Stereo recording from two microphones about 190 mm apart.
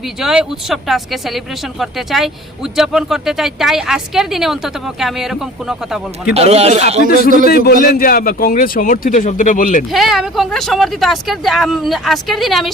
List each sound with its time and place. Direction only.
0.2 s speech: centre (ahead or behind)
6.3 s a man's voice: 35° right (ahead or behind)
6.9 s a man's voice: 45° right (ahead or behind)
7.4 s a man's voice: 55° left (ahead or behind)
9.9 s speech: centre (ahead or behind)